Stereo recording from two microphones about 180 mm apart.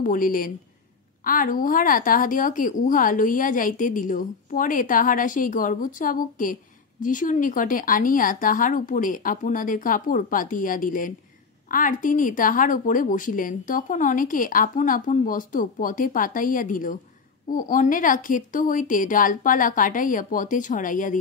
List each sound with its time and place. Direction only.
0.0 s a woman's voice: 50° left (ahead or behind)